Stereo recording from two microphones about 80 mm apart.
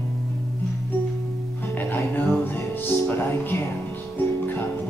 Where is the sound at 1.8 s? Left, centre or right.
Left.